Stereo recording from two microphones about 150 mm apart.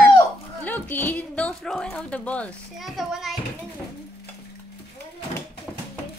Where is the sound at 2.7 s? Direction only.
Centre (ahead or behind).